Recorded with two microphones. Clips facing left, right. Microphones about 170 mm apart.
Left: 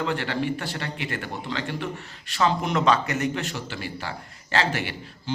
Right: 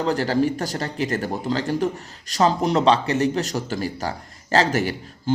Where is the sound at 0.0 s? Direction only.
40° right (ahead or behind).